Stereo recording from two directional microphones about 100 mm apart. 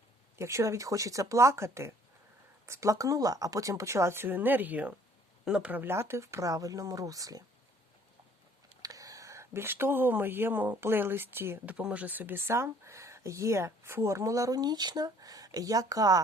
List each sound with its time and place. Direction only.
0.3 s speech: 30° right (ahead or behind)
8.8 s speech: 35° right (ahead or behind)